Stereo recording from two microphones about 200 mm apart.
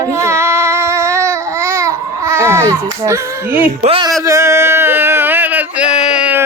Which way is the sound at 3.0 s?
15° right (ahead or behind).